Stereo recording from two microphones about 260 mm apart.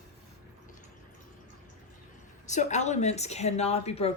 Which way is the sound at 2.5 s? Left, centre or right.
Left.